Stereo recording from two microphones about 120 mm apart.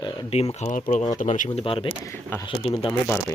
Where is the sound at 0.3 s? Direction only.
60° left (ahead or behind); by 1.5 s 90° left.